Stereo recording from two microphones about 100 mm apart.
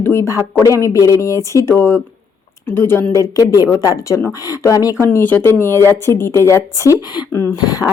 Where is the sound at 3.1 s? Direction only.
35° left (ahead or behind).